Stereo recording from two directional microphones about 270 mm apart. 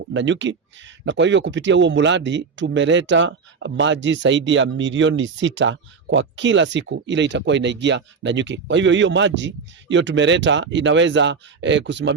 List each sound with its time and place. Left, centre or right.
0.1 s speech: right